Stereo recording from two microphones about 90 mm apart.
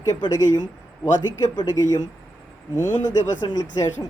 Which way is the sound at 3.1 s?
45° left (ahead or behind).